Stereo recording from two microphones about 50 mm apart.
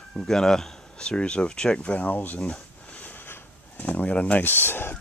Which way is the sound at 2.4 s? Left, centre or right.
Left.